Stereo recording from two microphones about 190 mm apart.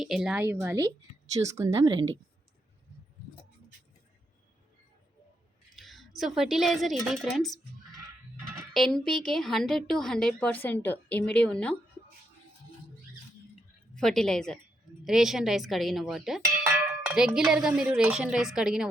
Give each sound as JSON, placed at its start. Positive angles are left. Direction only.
{"t": 0.0, "sound": "speech", "side_deg": 0}
{"t": 5.7, "sound": "a woman's voice", "side_deg": 0}
{"t": 8.7, "sound": "speech", "side_deg": 0}
{"t": 13.9, "sound": "speech", "side_deg": 5}